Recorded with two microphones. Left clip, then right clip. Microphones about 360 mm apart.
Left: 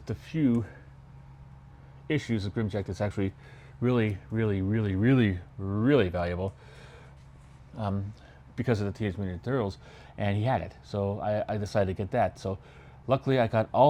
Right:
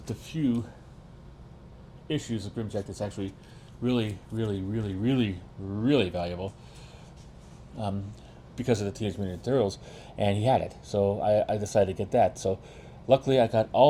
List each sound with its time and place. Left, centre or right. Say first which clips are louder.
0.0 s speech: left 2 dB; left
2.1 s speech: left 2 dB; left
4.4 s speech: left 2 dB; left
4.8 s speech: left 3 dB; left
7.8 s speech: even; left